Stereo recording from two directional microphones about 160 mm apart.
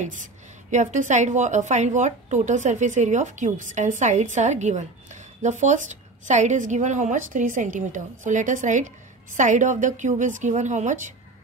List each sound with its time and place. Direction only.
0.0 s a woman's voice: 50° right (ahead or behind)